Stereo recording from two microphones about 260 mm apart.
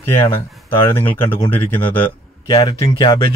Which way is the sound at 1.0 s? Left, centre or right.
Centre.